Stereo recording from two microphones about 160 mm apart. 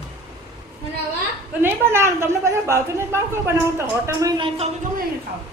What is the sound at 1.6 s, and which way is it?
Speech, 15° right (ahead or behind).